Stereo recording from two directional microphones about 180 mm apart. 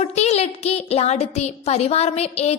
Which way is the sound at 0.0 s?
35° left (ahead or behind).